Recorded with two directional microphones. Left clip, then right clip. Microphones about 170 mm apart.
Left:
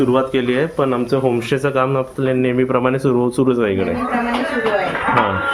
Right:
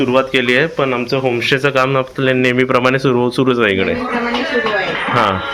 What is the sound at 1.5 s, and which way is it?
A man's voice, 5° left (ahead or behind).